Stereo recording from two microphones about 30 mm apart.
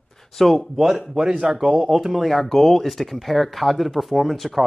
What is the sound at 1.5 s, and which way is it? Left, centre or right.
Speech, centre.